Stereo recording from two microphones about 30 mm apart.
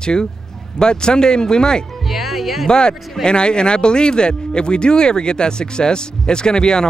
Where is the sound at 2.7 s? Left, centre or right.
Left.